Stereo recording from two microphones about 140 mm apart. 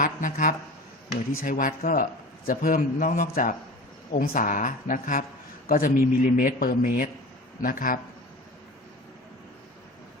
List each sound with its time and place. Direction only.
0.0 s speech: 70° left (ahead or behind)
5.6 s a man's voice: 90° left